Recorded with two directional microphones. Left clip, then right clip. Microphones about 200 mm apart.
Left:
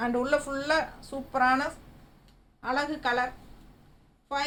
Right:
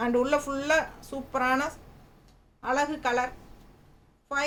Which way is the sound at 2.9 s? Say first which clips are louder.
Even; 15° right (ahead or behind).